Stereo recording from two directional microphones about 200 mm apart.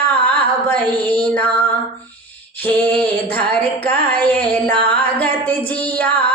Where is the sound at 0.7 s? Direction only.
5° left (ahead or behind).